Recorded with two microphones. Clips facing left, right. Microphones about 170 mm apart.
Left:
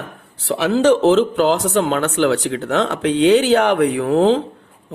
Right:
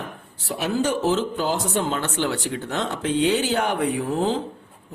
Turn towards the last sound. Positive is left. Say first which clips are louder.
# left 8 dB
turn(degrees=70)  # may be behind; listen again after turning